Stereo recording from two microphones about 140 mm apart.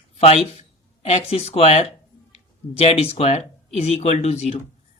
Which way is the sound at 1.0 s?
45° left (ahead or behind).